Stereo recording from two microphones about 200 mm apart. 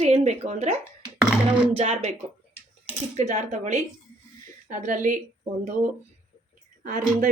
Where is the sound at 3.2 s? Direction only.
35° right (ahead or behind).